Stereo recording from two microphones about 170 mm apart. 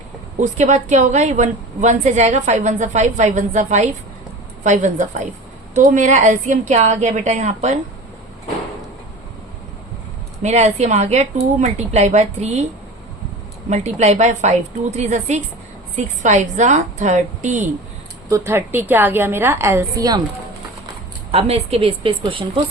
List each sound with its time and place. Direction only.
0.3 s a woman's voice: 45° right (ahead or behind)
10.4 s a woman's voice: 40° right (ahead or behind)
13.7 s a woman's voice: 40° right (ahead or behind)
18.3 s a woman's voice: 15° right (ahead or behind)
21.3 s a woman's voice: 35° right (ahead or behind)